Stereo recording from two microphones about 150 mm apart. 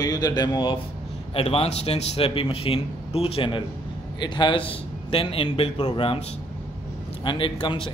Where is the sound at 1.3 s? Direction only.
40° left (ahead or behind).